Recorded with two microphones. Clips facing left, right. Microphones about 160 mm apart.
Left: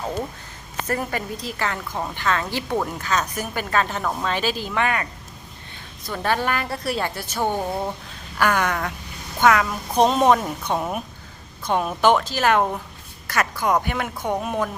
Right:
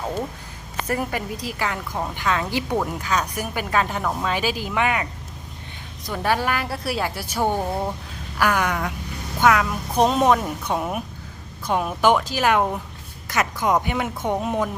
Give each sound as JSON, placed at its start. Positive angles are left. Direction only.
{"t": 0.9, "sound": "a woman's voice", "side_deg": -10}
{"t": 6.1, "sound": "a woman's voice", "side_deg": -10}